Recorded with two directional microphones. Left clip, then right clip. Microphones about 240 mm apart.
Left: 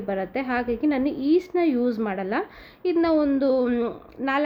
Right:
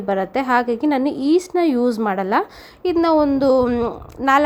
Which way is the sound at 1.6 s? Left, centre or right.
Centre.